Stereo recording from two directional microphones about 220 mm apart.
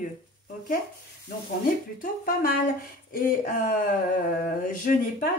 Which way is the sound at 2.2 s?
40° left (ahead or behind).